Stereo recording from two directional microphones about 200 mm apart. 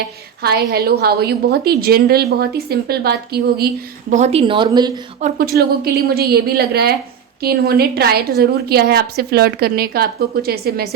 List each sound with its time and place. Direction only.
0.4 s a woman's voice: 50° right (ahead or behind)
4.1 s speech: 35° right (ahead or behind)
5.2 s a woman's voice: 50° right (ahead or behind)